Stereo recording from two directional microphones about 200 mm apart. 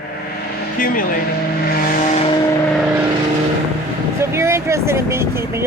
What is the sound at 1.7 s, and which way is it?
Vehicle, 40° left (ahead or behind).